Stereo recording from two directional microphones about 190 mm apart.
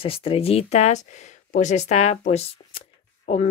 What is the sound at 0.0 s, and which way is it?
Speech, 30° left (ahead or behind).